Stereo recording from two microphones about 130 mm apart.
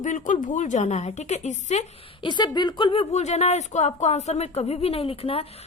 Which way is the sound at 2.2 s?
35° left (ahead or behind).